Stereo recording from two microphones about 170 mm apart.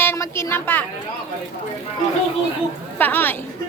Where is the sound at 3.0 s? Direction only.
10° left (ahead or behind).